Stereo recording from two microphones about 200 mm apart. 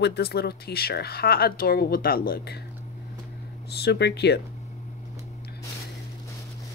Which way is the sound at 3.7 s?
55° left (ahead or behind).